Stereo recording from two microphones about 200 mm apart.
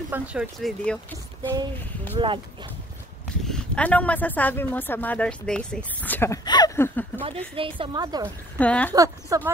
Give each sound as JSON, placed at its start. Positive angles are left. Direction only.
{"t": 0.1, "sound": "speech", "side_deg": -5}
{"t": 2.1, "sound": "a woman's voice", "side_deg": -25}
{"t": 3.4, "sound": "speech", "side_deg": 5}
{"t": 7.5, "sound": "a woman's voice", "side_deg": -25}
{"t": 8.5, "sound": "speech", "side_deg": 5}
{"t": 8.9, "sound": "speech", "side_deg": -15}